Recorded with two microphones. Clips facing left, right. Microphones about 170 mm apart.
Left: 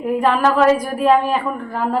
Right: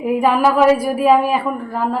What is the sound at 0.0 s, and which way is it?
A woman's voice, 10° right (ahead or behind).